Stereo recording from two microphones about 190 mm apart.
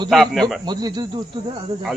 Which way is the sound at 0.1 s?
Centre (ahead or behind).